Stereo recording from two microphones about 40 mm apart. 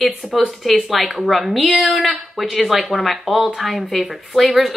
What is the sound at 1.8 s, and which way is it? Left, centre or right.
Speech, centre.